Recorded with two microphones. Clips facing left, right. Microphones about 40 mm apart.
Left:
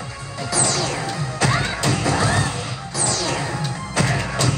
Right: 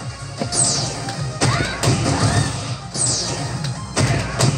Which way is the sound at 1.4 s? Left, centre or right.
Left.